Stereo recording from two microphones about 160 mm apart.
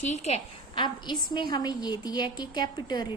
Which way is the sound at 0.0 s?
45° left (ahead or behind).